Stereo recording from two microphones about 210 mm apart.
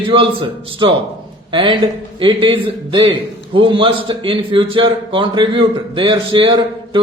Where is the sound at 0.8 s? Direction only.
25° right (ahead or behind).